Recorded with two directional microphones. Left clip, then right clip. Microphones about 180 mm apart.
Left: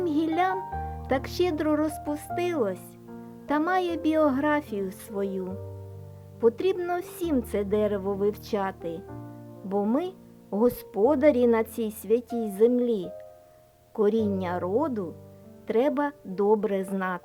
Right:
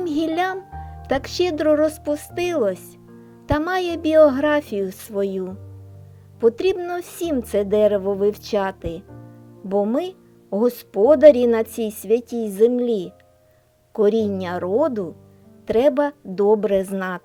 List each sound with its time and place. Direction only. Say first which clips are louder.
0.0 s music: right 3 dB; 15° right (ahead or behind)
1.0 s a woman's voice: right 6 dB; 15° right (ahead or behind)